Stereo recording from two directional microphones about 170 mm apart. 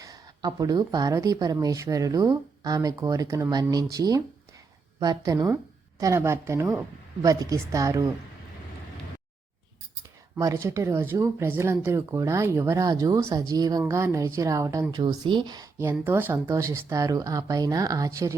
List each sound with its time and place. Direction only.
0.0 s speech: 20° right (ahead or behind)
10.3 s speech: 20° right (ahead or behind)